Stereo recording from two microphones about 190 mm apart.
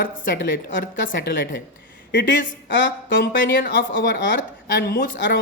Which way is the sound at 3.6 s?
70° left (ahead or behind).